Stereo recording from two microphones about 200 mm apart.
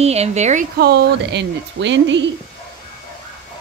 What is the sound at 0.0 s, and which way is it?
Speech, 30° right (ahead or behind).